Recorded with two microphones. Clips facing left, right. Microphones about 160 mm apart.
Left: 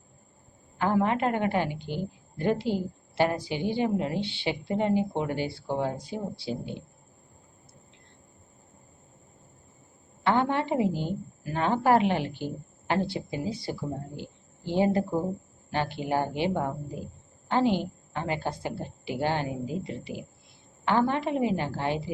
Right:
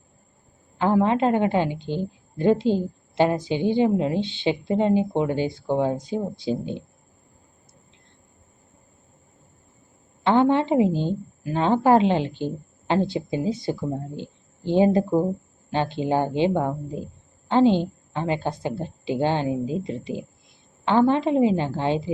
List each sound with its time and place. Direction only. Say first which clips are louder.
0.8 s a woman's voice: right 5 dB; 20° right (ahead or behind)
10.2 s a woman's voice: right 6 dB; 20° right (ahead or behind)
14.2 s a sound: right 5 dB; 20° right (ahead or behind)
15.7 s a woman's voice: right 5 dB; 20° right (ahead or behind)